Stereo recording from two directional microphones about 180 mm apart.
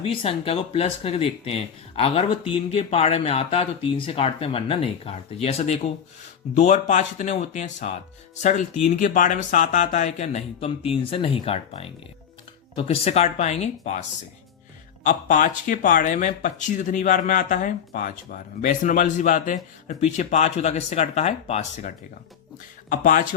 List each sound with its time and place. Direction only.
0.0 s speech: 30° left (ahead or behind)
15.0 s speech: 45° left (ahead or behind)